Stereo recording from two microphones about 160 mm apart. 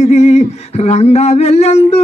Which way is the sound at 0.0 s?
45° left (ahead or behind).